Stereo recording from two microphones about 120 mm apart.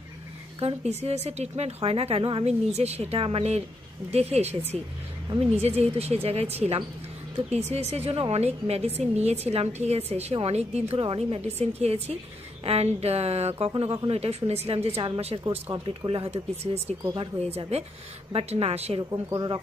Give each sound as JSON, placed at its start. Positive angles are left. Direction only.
{"t": 0.6, "sound": "a woman's voice", "side_deg": -60}
{"t": 15.7, "sound": "a woman's voice", "side_deg": -45}
{"t": 18.9, "sound": "speech", "side_deg": -40}